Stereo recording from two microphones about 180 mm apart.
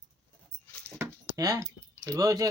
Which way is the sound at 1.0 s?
20° right (ahead or behind).